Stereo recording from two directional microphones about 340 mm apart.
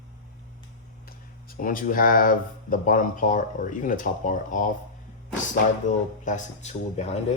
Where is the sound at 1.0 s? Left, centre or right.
Left.